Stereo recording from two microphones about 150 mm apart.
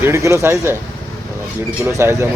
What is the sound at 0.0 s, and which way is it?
Speech, 20° right (ahead or behind).